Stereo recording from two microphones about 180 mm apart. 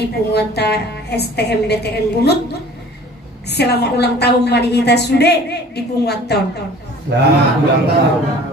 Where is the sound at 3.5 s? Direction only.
65° left (ahead or behind).